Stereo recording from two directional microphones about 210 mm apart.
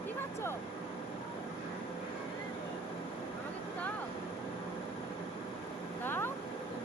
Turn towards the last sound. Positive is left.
turn(degrees=10)  # may be behind; listen again after turning